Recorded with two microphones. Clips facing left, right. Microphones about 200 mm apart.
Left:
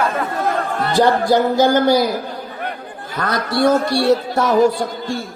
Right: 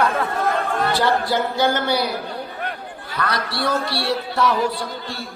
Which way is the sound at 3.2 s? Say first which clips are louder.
Left 7 dB; 45° left (ahead or behind).